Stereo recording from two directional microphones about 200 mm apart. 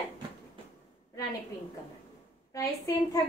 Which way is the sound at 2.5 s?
15° left (ahead or behind).